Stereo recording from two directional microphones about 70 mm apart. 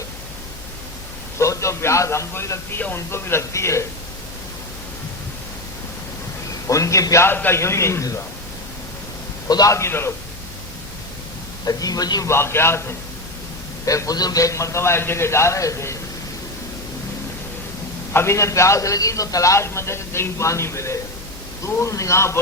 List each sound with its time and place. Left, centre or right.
1.4 s a man's voice: left
6.7 s a man's voice: left
7.3 s a man's voice: left
7.6 s a man's voice: left
9.5 s speech: left
9.7 s a man's voice: left
11.6 s speech: left
12.2 s a man's voice: left
13.8 s a man's voice: left
18.1 s a man's voice: left